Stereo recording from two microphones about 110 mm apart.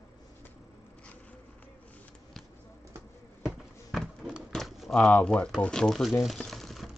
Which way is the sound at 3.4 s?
Centre (ahead or behind).